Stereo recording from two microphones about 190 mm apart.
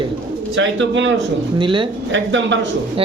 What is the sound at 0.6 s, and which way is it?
Speech, 75° right (ahead or behind).